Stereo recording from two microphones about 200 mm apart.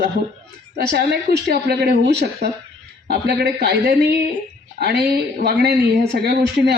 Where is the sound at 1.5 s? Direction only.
55° right (ahead or behind).